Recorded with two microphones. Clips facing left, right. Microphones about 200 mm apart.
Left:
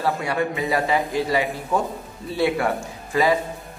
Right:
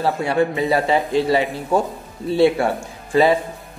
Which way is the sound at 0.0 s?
30° right (ahead or behind).